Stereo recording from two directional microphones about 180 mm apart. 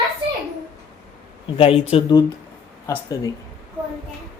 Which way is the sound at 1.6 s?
35° left (ahead or behind).